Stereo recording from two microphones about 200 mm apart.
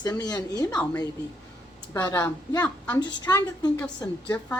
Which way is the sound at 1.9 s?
10° left (ahead or behind).